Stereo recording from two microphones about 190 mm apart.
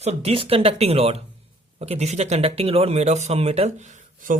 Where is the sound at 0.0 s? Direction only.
35° right (ahead or behind).